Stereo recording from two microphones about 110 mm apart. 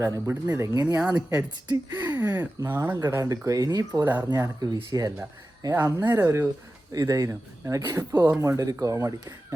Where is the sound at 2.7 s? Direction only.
25° right (ahead or behind).